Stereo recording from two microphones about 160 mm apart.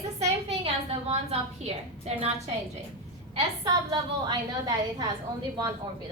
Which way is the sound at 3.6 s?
25° right (ahead or behind).